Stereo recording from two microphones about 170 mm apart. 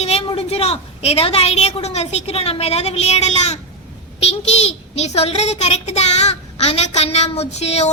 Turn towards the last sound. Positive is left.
turn(degrees=40)  # may be behind; listen again after turning